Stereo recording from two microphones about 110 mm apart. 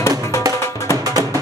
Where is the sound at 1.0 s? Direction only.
35° right (ahead or behind).